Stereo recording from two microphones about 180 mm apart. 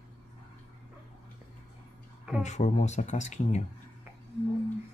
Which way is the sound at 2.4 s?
40° left (ahead or behind).